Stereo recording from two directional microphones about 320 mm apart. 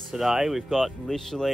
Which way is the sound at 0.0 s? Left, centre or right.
Centre.